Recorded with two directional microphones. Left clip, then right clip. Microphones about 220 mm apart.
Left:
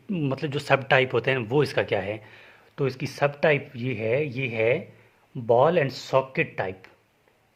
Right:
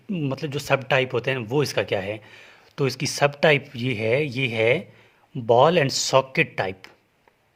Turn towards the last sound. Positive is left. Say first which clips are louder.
# right 3 dB
turn(degrees=-45)  # may be behind; listen again after turning